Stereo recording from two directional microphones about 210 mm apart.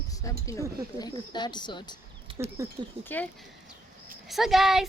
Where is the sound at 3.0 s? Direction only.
10° left (ahead or behind).